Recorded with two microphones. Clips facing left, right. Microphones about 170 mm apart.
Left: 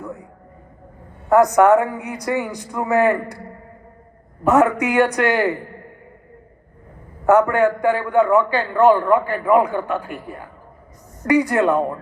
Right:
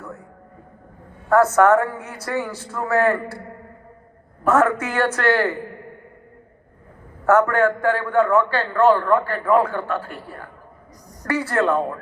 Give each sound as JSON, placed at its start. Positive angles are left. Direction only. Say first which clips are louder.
{"t": 0.0, "sound": "a sound", "louder": "left 4 dB", "side_deg": 15}
{"t": 1.3, "sound": "a man's voice", "louder": "left 2 dB", "side_deg": 15}
{"t": 4.4, "sound": "a man's voice", "louder": "left 3 dB", "side_deg": 15}
{"t": 7.3, "sound": "a man's voice", "louder": "left 2 dB", "side_deg": 15}